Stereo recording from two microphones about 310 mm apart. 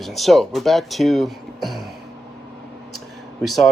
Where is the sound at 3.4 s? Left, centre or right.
Centre.